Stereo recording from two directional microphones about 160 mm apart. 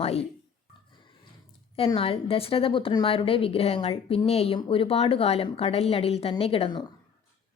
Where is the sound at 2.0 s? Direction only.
35° left (ahead or behind).